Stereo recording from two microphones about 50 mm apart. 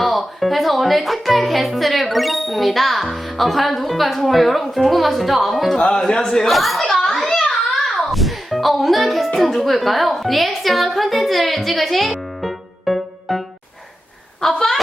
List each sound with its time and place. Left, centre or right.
0.0 s speech: centre
5.7 s a child's voice: centre
7.7 s music: centre
14.4 s a sound: centre